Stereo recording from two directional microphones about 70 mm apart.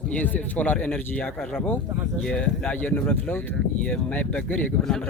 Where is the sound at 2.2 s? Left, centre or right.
Centre.